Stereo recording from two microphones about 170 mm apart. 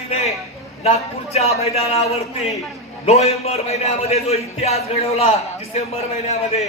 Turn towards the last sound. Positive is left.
turn(degrees=40)  # may be behind; listen again after turning